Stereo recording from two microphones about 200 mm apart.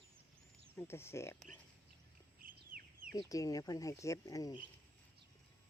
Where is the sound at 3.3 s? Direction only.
15° left (ahead or behind).